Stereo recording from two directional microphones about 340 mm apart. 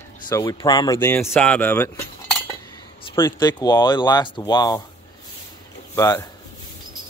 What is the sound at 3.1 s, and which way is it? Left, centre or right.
Speech, centre.